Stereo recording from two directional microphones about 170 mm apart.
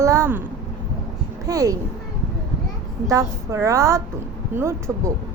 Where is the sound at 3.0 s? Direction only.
20° right (ahead or behind).